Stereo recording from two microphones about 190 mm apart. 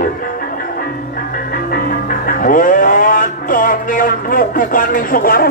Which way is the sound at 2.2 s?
45° left (ahead or behind).